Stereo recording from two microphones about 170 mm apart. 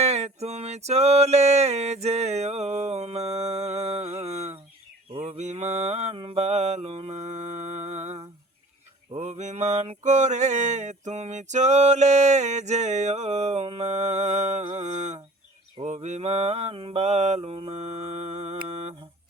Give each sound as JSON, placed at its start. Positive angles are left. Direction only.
{"t": 0.0, "sound": "mantra", "side_deg": -40}